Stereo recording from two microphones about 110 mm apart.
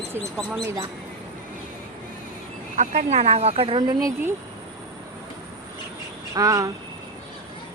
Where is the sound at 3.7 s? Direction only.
40° right (ahead or behind).